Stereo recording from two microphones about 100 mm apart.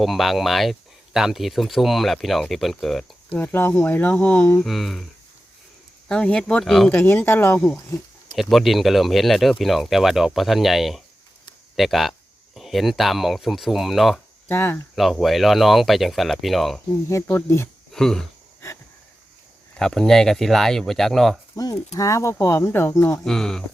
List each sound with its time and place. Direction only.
0.0 s speech: centre (ahead or behind)
3.3 s speech: 20° left (ahead or behind)
4.6 s speech: centre (ahead or behind)
6.1 s speech: 10° left (ahead or behind)
6.9 s speech: 20° left (ahead or behind)
8.4 s speech: centre (ahead or behind)
14.4 s hum: 20° left (ahead or behind)
14.9 s speech: centre (ahead or behind)
17.3 s speech: 25° left (ahead or behind)
17.9 s speech: 5° left (ahead or behind)
18.6 s wheeze: 30° left (ahead or behind)
19.7 s speech: 5° left (ahead or behind)
21.5 s speech: 40° left (ahead or behind)
23.2 s speech: 5° left (ahead or behind)